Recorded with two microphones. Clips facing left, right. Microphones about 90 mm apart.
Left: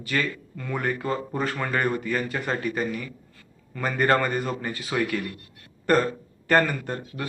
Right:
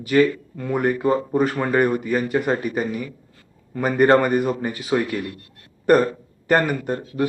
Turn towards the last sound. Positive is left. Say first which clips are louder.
# right 9 dB
turn(degrees=-15)  # may be behind; listen again after turning